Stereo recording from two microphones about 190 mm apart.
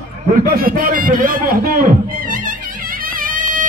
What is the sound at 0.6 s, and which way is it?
Music, 50° right (ahead or behind).